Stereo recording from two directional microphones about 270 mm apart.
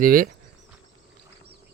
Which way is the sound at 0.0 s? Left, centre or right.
Right.